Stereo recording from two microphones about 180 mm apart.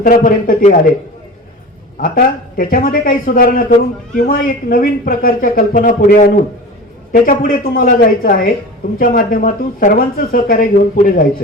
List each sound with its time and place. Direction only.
0.0 s speech: 50° left (ahead or behind)
2.0 s speech: 50° left (ahead or behind)